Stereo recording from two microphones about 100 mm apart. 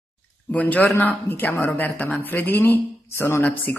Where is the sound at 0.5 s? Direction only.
15° left (ahead or behind).